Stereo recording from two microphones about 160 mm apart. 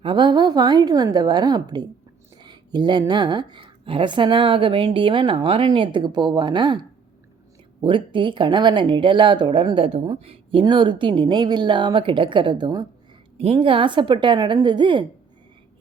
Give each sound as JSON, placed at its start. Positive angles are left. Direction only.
{"t": 0.0, "sound": "a woman's voice", "side_deg": -30}
{"t": 2.4, "sound": "a sound", "side_deg": -25}
{"t": 3.1, "sound": "a woman's voice", "side_deg": -30}